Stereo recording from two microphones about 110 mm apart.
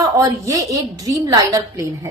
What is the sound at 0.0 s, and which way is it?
A woman's voice, 30° right (ahead or behind).